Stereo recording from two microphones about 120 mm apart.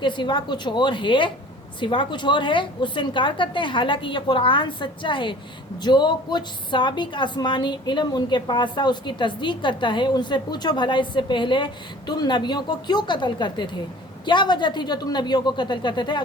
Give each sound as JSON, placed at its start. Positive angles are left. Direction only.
{"t": 0.0, "sound": "a woman's voice", "side_deg": 40}